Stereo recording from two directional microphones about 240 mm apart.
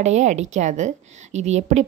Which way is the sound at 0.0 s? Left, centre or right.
Right.